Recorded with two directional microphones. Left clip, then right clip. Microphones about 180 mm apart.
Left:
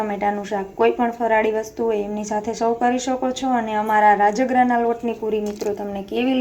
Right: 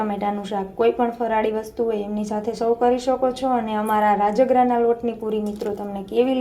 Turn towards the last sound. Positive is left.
turn(degrees=0)  # may be behind; listen again after turning